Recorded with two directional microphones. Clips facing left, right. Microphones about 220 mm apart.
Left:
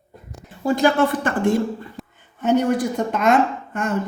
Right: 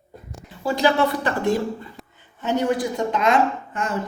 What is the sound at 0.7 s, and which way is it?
Speech, 50° left (ahead or behind).